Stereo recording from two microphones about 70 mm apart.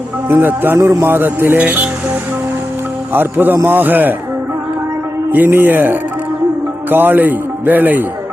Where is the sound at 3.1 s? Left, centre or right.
Right.